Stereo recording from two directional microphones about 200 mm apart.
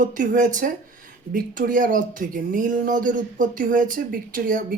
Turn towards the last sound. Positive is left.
turn(degrees=-45)  # may be behind; listen again after turning